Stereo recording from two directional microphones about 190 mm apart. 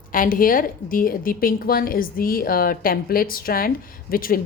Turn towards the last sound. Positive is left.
turn(degrees=50)  # may be behind; listen again after turning